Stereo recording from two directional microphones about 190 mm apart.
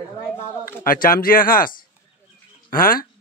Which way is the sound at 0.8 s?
50° left (ahead or behind).